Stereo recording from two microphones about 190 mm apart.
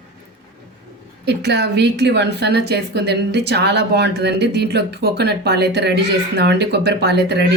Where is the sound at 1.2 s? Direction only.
60° right (ahead or behind).